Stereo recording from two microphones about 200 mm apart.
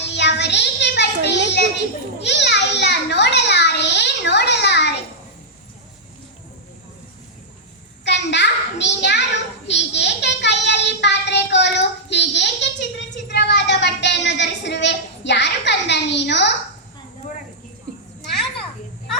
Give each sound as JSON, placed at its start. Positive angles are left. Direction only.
{"t": 0.1, "sound": "child singing", "side_deg": 60}
{"t": 2.2, "sound": "a sound", "side_deg": 60}
{"t": 8.0, "sound": "a child's voice", "side_deg": 60}
{"t": 9.6, "sound": "child singing", "side_deg": 60}